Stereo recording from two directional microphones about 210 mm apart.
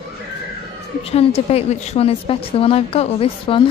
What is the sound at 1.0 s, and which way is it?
A woman's voice, 30° left (ahead or behind).